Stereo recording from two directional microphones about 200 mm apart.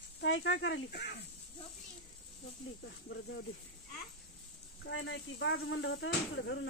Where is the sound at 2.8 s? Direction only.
60° left (ahead or behind).